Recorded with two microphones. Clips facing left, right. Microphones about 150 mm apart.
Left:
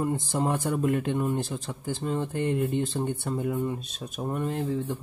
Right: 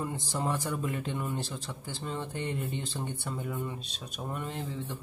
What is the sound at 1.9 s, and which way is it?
Speech, 45° left (ahead or behind).